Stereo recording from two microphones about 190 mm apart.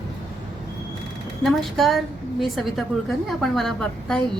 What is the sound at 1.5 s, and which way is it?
A woman's voice, centre (ahead or behind).